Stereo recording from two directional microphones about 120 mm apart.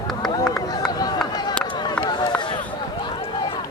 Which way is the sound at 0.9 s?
30° left (ahead or behind).